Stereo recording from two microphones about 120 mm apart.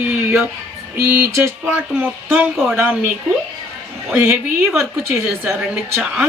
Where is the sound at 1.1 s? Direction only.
15° right (ahead or behind).